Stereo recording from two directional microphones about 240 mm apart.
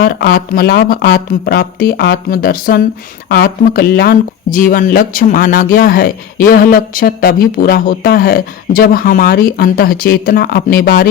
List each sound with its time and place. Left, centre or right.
0.0 s a man's voice: left